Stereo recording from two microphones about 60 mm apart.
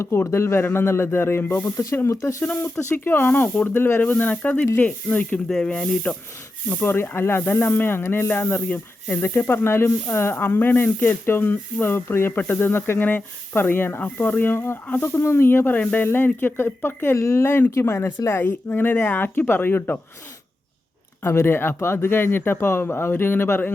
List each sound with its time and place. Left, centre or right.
0.0 s speech: left
1.6 s speech: left
2.9 s speech: left
4.0 s speech: left
5.5 s speech: centre
6.7 s speech: left
9.1 s speech: left
15.8 s speech: left
16.0 s speech: left
17.2 s speech: left
18.3 s speech: left
21.2 s speech: left